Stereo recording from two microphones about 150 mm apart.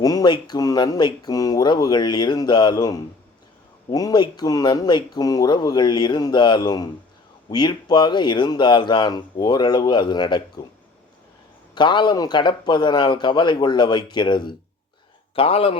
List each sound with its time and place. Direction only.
0.0 s speech: 25° left (ahead or behind)
11.7 s a man's voice: 30° left (ahead or behind)